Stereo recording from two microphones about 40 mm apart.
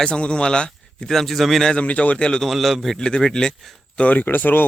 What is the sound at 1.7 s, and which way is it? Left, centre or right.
Speech, left.